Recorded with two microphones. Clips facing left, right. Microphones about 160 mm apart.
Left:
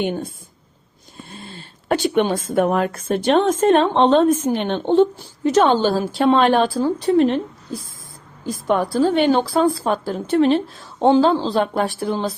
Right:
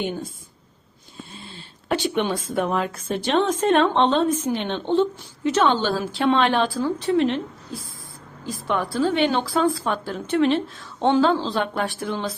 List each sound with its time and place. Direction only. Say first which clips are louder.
0.0 s speech: left 5 dB; 60° left (ahead or behind)
1.9 s a woman's voice: left 5 dB; 50° left (ahead or behind)